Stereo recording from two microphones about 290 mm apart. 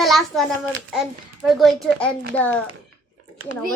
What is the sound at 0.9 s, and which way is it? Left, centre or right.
A child's voice, centre.